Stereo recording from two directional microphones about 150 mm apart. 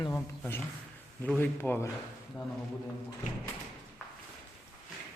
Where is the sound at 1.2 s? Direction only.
10° left (ahead or behind).